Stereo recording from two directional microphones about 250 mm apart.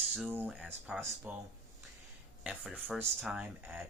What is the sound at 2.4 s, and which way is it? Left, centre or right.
Speech, centre.